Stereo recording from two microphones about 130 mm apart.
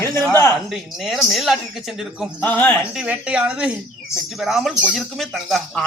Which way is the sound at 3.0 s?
10° right (ahead or behind).